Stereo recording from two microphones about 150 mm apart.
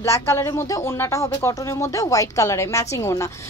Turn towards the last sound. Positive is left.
turn(degrees=20)  # may be behind; listen again after turning